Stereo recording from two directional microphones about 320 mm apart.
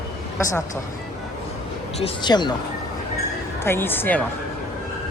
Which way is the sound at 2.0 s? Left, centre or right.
Centre.